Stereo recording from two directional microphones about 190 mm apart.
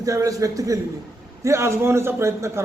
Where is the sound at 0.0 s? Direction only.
15° right (ahead or behind).